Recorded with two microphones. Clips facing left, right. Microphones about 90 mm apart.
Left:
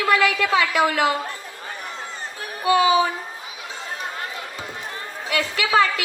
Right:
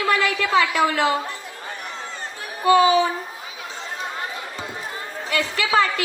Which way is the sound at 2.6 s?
35° right (ahead or behind).